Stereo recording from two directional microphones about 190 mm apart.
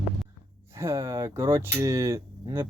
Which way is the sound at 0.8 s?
15° right (ahead or behind).